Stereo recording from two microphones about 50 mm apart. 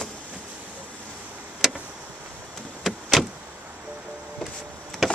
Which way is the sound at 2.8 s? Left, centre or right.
Centre.